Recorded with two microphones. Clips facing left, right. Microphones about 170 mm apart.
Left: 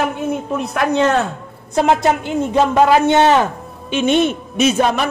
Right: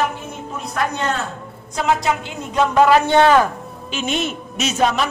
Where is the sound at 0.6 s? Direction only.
65° left (ahead or behind).